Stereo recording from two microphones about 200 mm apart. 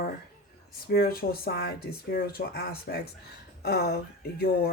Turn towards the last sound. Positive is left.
turn(degrees=50)  # may be behind; listen again after turning